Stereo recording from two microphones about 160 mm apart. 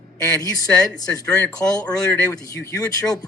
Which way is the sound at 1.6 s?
20° left (ahead or behind).